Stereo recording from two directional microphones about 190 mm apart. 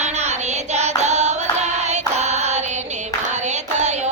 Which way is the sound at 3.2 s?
40° right (ahead or behind).